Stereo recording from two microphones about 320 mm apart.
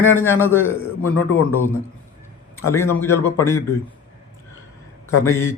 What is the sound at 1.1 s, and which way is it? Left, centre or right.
Speech, left.